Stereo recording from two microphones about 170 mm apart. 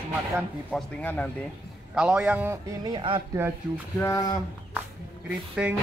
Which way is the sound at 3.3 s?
15° right (ahead or behind).